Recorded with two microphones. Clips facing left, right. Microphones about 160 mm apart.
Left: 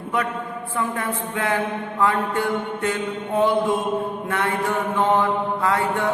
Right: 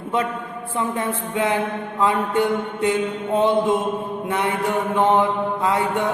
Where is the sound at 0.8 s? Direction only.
20° right (ahead or behind).